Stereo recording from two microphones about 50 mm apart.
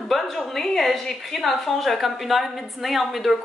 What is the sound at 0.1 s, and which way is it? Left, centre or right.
A woman's voice, centre.